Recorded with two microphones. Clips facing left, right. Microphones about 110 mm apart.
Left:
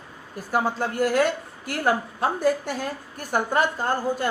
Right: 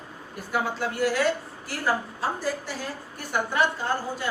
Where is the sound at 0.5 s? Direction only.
45° left (ahead or behind).